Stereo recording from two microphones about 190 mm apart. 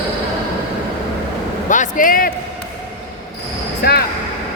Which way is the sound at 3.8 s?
55° left (ahead or behind).